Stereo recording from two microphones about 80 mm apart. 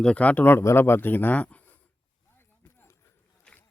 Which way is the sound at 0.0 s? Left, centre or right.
Centre.